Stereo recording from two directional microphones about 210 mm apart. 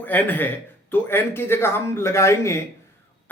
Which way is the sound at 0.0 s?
10° left (ahead or behind).